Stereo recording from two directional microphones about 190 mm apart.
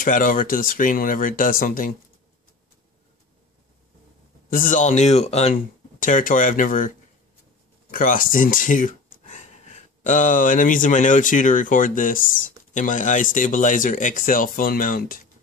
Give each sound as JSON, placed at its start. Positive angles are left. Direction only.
{"t": 0.0, "sound": "speech", "side_deg": 45}
{"t": 4.5, "sound": "speech", "side_deg": 45}
{"t": 7.9, "sound": "speech", "side_deg": 45}